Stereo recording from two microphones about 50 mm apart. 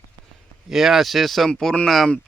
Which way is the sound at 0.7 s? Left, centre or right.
Centre.